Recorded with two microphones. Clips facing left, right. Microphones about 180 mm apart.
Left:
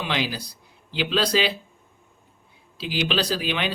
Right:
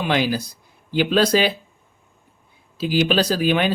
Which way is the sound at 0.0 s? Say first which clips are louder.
Right 7 dB; 50° right (ahead or behind).